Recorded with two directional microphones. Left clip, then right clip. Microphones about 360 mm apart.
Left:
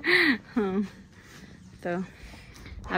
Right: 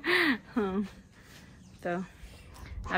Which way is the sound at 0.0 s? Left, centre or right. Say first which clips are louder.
Left 4 dB; centre.